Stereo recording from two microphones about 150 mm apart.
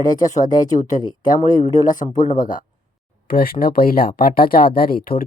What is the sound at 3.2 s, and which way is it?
Speech, 80° left.